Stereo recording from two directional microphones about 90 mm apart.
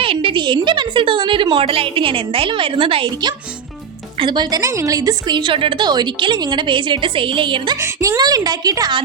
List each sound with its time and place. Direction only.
0.0 s a woman's voice: 80° right
4.2 s a woman's voice: 55° right (ahead or behind)
4.6 s a woman's voice: 35° right (ahead or behind)
5.4 s a woman's voice: 70° right (ahead or behind)
7.8 s speech: 35° right (ahead or behind)